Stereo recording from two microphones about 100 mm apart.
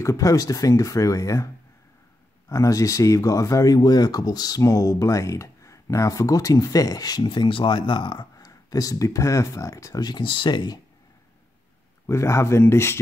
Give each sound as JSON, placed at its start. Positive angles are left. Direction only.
{"t": 0.0, "sound": "speech", "side_deg": 30}
{"t": 2.5, "sound": "speech", "side_deg": 35}
{"t": 10.0, "sound": "speech", "side_deg": 50}
{"t": 12.1, "sound": "speech", "side_deg": 30}